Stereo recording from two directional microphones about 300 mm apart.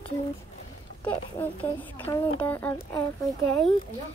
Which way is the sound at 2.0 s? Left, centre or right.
Centre.